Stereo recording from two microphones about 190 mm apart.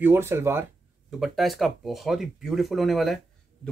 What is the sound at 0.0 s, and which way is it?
Speech, 10° right (ahead or behind).